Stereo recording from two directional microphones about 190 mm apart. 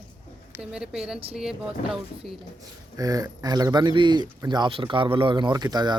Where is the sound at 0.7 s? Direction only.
5° right (ahead or behind).